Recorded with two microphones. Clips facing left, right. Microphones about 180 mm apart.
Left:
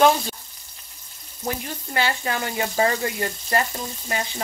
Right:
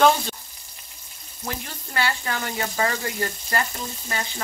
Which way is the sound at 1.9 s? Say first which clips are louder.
Left 2 dB; 20° left (ahead or behind).